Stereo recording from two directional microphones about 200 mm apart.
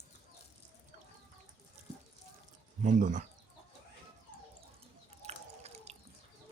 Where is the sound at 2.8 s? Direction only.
40° right (ahead or behind).